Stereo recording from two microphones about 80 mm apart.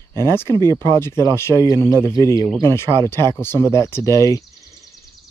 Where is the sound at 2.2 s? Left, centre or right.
Right.